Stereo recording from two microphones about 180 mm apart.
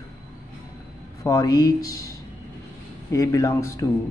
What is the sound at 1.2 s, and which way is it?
Speech, 20° left (ahead or behind).